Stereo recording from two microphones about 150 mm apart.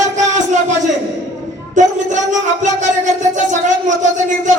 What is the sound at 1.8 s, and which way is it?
Speech, 55° right (ahead or behind).